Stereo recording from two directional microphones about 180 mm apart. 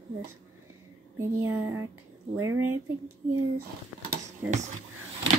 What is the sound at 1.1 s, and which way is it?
Speech, 15° right (ahead or behind).